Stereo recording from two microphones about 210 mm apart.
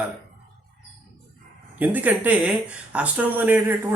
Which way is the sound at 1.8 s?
10° right (ahead or behind).